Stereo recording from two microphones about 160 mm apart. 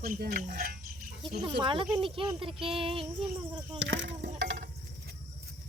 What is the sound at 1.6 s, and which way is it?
Speech, 30° right (ahead or behind).